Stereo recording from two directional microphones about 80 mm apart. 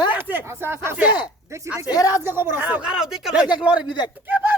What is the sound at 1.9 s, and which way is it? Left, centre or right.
Speech, left.